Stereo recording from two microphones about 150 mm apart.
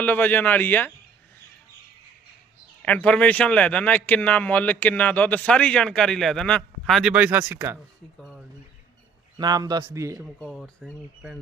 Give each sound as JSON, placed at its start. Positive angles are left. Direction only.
{"t": 0.0, "sound": "speech", "side_deg": 10}
{"t": 2.8, "sound": "speech", "side_deg": 10}
{"t": 7.1, "sound": "speech", "side_deg": -10}
{"t": 8.2, "sound": "a sound", "side_deg": 0}
{"t": 9.4, "sound": "a man's voice", "side_deg": -25}
{"t": 10.2, "sound": "speech", "side_deg": 0}